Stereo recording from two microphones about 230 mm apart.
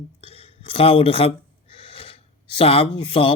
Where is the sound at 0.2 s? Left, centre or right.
Left.